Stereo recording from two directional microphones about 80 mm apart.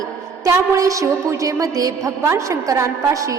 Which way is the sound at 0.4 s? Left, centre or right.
Right.